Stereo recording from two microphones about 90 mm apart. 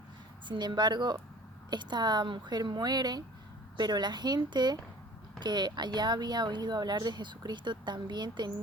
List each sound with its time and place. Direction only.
0.4 s a woman's voice: 60° right (ahead or behind)